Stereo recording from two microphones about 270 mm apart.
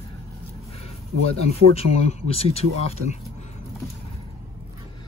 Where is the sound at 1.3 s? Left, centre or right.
Left.